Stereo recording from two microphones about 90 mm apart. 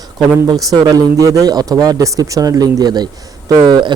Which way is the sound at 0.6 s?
45° right (ahead or behind).